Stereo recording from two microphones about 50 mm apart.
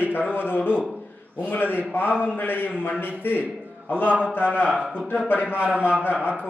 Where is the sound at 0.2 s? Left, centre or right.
Right.